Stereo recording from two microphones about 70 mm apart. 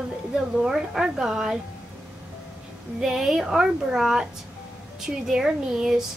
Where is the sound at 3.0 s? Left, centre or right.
Centre.